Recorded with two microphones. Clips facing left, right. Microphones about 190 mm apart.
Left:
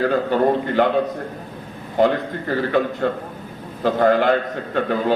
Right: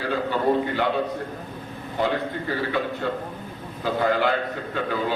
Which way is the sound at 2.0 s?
50° left (ahead or behind).